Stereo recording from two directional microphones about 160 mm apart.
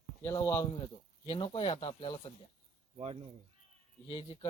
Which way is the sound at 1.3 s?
30° left (ahead or behind).